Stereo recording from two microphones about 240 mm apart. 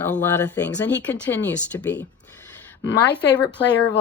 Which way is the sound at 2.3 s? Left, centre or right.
Centre.